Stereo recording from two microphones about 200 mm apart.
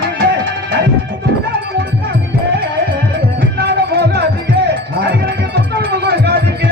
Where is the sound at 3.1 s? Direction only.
55° right (ahead or behind).